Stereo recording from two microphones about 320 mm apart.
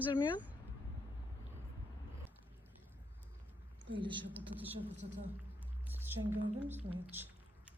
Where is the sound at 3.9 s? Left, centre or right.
Centre.